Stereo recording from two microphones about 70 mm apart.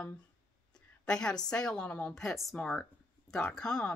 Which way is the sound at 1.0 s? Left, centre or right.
Centre.